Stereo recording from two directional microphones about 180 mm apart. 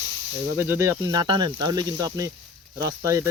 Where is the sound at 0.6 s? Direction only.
15° right (ahead or behind).